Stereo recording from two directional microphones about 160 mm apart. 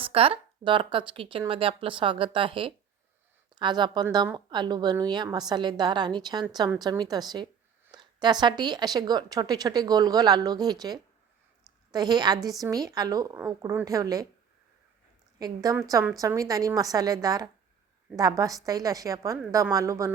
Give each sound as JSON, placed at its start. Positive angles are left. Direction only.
{"t": 0.0, "sound": "a woman's voice", "side_deg": -35}
{"t": 15.4, "sound": "a woman's voice", "side_deg": -25}